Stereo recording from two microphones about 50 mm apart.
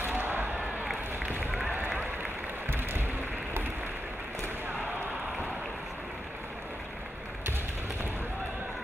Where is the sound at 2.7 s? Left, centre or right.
Right.